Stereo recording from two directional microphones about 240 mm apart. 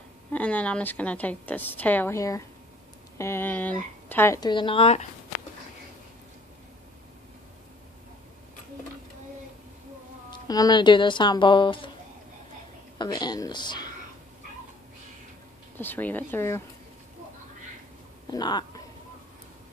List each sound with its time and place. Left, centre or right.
0.3 s a woman's voice: centre; by 5.0 s left
10.5 s a woman's voice: centre
12.9 s a woman's voice: centre
15.8 s a woman's voice: centre
18.2 s a sound: centre